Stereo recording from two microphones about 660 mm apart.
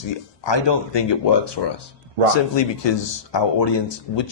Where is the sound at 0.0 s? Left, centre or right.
Left.